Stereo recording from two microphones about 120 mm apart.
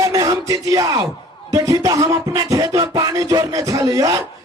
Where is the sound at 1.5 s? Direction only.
25° right (ahead or behind).